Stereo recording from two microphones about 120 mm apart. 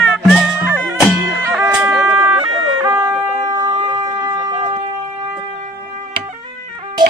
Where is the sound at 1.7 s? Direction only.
20° right (ahead or behind).